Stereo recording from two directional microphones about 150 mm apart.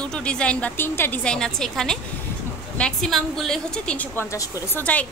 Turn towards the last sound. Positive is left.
turn(degrees=10)  # may be behind; listen again after turning